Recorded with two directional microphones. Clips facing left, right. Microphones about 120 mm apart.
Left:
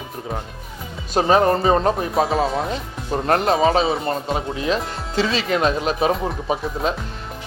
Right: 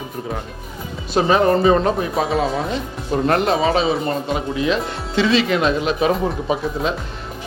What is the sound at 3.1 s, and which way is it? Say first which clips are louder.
Speech: right 1 dB; 35° left (ahead or behind).